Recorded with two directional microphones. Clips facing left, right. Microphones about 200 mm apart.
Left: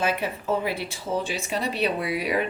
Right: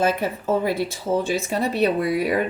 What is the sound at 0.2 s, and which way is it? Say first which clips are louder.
Speech: right 4 dB; 45° right (ahead or behind).